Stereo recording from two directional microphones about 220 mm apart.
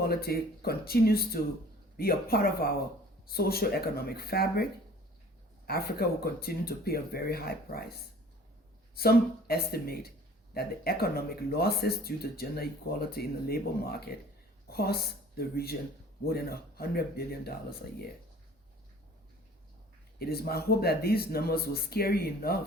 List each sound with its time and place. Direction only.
0.0 s speech: 45° left (ahead or behind)
5.6 s speech: 45° left (ahead or behind)
9.0 s speech: 45° left (ahead or behind)
20.1 s speech: 45° left (ahead or behind)